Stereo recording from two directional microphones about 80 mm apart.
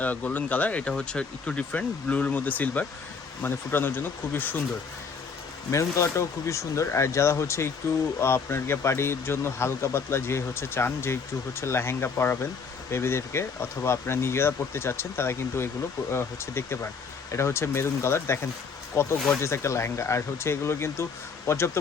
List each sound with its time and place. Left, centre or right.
0.0 s speech: left
5.7 s speech: left